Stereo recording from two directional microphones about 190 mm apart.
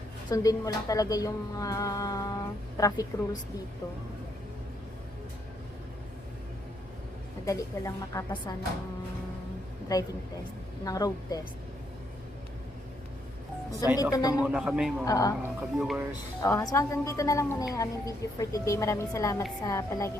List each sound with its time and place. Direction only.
0.3 s a woman's voice: 20° left (ahead or behind)
7.4 s a woman's voice: 15° left (ahead or behind)
9.9 s a woman's voice: 20° left (ahead or behind)
13.9 s a woman's voice: 20° left (ahead or behind)
14.4 s a man's voice: 5° right (ahead or behind)
15.0 s a woman's voice: 20° left (ahead or behind)
15.4 s speech: 10° right (ahead or behind)
16.4 s a woman's voice: 15° left (ahead or behind)